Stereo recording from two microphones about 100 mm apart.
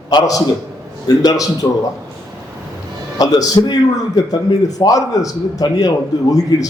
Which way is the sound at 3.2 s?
40° left (ahead or behind).